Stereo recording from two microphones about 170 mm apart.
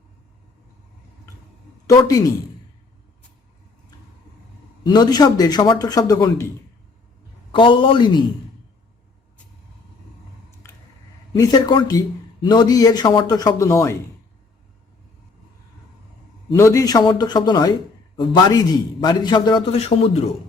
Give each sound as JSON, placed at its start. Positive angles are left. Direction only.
{"t": 2.0, "sound": "a man's voice", "side_deg": 20}
{"t": 4.8, "sound": "a man's voice", "side_deg": 25}
{"t": 7.5, "sound": "a man's voice", "side_deg": 30}
{"t": 11.3, "sound": "a man's voice", "side_deg": 25}
{"t": 16.6, "sound": "a man's voice", "side_deg": 20}